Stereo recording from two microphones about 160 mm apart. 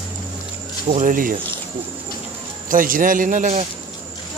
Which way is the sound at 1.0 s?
60° right (ahead or behind).